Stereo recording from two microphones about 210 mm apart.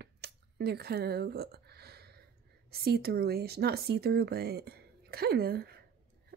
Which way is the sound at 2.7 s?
50° right (ahead or behind).